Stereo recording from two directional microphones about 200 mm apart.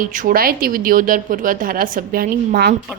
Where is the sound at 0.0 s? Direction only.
40° right (ahead or behind).